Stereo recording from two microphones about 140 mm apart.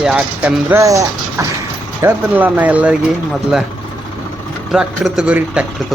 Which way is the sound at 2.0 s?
10° right (ahead or behind).